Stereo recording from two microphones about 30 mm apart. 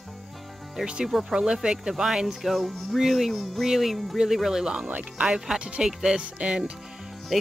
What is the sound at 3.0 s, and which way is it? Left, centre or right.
Speech, centre.